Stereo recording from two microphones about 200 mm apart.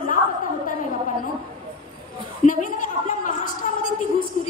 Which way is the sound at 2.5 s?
40° left (ahead or behind).